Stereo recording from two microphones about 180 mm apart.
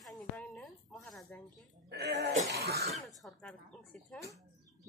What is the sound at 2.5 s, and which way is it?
Throat clearing, 65° right (ahead or behind).